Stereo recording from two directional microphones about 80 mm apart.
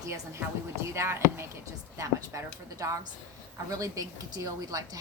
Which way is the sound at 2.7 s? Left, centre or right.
Right.